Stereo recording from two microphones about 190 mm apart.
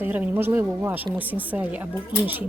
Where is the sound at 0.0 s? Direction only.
10° right (ahead or behind).